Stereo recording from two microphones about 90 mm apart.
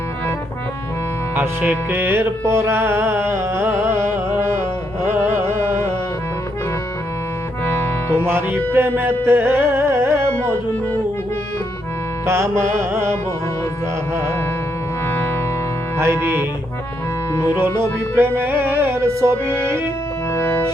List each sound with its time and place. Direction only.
1.4 s music: 20° right (ahead or behind)
7.6 s music: 25° left (ahead or behind)
8.2 s music: 25° right (ahead or behind)
12.2 s music: 30° right (ahead or behind)
16.0 s music: 25° right (ahead or behind)
17.6 s music: 25° right (ahead or behind)
20.3 s music: 25° left (ahead or behind)